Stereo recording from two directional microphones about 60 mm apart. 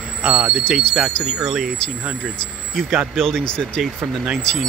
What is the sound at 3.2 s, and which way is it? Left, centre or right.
Speech, centre.